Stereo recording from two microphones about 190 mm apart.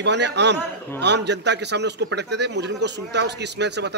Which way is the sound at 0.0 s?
65° right (ahead or behind).